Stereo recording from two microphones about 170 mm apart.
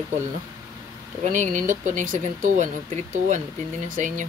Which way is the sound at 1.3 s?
45° right (ahead or behind).